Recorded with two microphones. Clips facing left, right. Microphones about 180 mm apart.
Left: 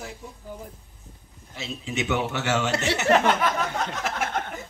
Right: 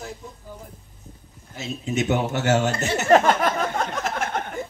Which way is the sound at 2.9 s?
40° right (ahead or behind).